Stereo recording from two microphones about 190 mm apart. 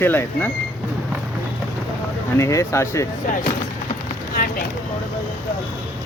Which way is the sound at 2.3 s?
15° left (ahead or behind).